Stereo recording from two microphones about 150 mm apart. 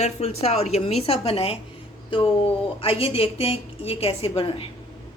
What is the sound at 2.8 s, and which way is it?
A woman's voice, 40° left (ahead or behind).